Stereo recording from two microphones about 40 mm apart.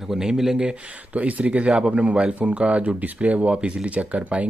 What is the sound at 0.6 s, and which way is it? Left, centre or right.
A man's voice, right.